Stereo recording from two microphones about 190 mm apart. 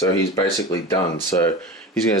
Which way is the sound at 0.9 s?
15° left (ahead or behind).